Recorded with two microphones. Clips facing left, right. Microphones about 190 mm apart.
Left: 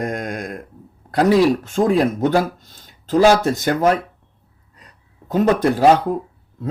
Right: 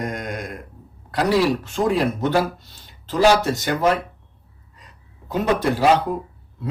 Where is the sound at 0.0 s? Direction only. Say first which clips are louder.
Left 3 dB; 50° left (ahead or behind).